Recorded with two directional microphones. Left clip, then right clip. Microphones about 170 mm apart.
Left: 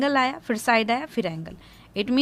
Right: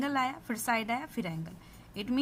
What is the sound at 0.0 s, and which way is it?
A woman's voice, 35° left (ahead or behind).